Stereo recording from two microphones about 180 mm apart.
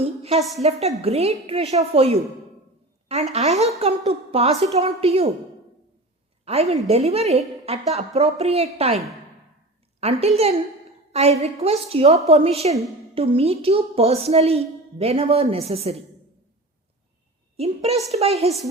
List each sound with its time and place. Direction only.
0.0 s a sound: 35° right (ahead or behind)
0.6 s a woman's voice: 35° right (ahead or behind)
6.4 s a woman's voice: 35° right (ahead or behind)
10.0 s a woman's voice: 35° right (ahead or behind)
17.6 s a woman's voice: 35° right (ahead or behind)